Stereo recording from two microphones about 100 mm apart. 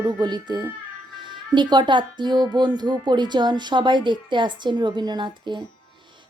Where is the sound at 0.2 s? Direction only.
45° right (ahead or behind).